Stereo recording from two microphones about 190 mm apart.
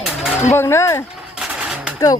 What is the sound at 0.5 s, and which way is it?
Speech, 15° left (ahead or behind).